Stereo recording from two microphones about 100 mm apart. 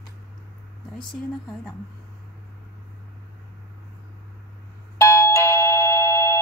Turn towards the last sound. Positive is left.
turn(degrees=25)  # may be behind; listen again after turning